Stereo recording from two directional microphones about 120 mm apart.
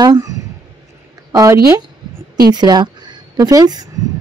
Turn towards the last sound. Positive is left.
turn(degrees=-30)  # may be behind; listen again after turning